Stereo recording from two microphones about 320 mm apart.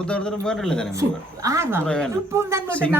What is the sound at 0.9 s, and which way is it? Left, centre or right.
Speech, centre.